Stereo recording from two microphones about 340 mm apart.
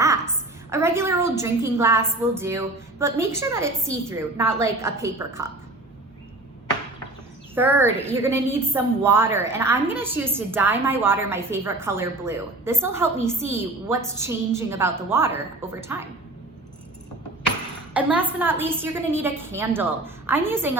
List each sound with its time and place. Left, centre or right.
0.7 s a woman's voice: centre
7.5 s a woman's voice: centre
17.9 s a woman's voice: centre